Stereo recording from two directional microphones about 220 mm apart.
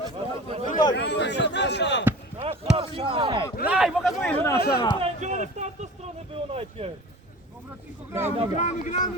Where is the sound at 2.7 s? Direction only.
25° right (ahead or behind).